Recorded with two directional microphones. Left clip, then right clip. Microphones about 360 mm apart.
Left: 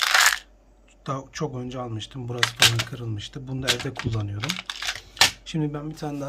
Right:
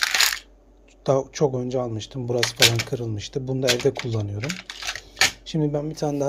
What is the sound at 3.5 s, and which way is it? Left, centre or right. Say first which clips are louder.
Speech: right 5 dB; centre.